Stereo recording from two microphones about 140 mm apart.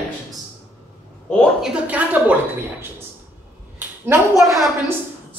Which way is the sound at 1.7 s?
10° right (ahead or behind).